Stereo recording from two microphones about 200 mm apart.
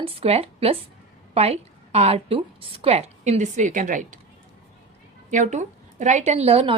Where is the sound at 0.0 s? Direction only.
30° right (ahead or behind).